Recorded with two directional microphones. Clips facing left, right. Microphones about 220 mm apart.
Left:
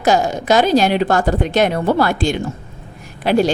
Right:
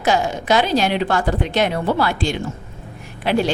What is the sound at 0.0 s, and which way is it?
A woman's voice, 40° left (ahead or behind).